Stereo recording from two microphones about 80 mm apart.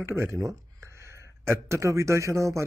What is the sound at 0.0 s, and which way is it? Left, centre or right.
Speech, right.